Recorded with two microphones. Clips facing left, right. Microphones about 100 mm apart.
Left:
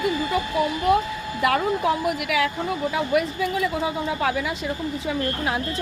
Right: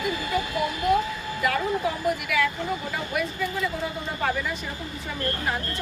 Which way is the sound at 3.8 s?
90° left.